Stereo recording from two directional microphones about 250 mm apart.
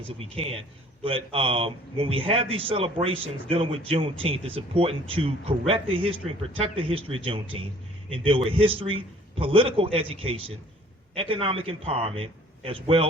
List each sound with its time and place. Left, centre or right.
1.0 s a man's voice: right